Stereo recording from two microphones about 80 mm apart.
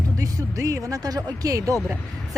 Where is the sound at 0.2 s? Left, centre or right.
Right.